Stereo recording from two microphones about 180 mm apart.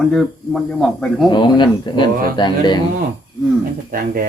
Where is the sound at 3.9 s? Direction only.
55° right (ahead or behind).